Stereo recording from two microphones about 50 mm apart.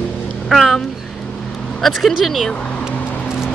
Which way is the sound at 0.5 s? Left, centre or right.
Centre.